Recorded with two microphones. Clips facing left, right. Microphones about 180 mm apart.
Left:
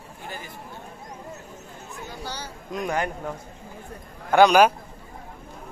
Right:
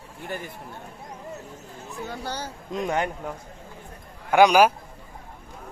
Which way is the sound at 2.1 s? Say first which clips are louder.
Right 3 dB; 50° right (ahead or behind).